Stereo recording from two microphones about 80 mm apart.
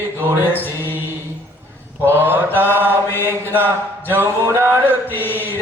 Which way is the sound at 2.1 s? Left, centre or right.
Right.